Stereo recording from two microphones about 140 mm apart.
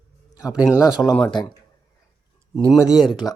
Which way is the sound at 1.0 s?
10° left (ahead or behind).